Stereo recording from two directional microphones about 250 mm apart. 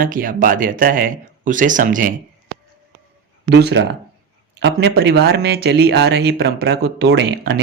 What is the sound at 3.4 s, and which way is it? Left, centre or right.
Speech, right.